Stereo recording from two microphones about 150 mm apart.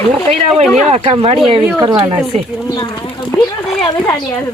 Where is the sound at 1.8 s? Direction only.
30° right (ahead or behind).